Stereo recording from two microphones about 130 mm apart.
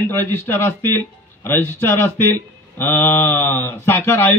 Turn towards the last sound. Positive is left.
turn(degrees=20)  # may be behind; listen again after turning